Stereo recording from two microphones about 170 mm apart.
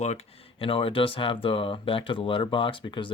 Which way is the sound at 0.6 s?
30° left (ahead or behind).